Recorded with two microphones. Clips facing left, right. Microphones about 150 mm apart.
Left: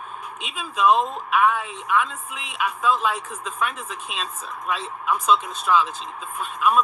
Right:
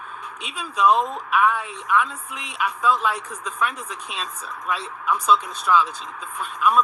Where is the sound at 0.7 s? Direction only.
25° left (ahead or behind).